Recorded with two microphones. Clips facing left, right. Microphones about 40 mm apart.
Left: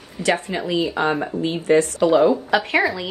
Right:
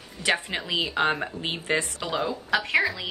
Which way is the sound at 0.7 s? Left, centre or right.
Right.